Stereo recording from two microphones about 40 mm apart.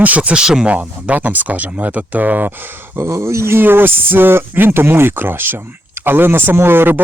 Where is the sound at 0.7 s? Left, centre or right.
Right.